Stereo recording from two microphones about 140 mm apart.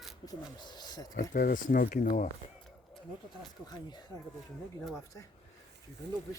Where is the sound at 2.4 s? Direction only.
40° left (ahead or behind).